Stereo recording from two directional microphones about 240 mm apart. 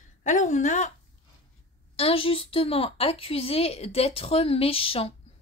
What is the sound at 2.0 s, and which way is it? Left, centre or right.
A woman's voice, left.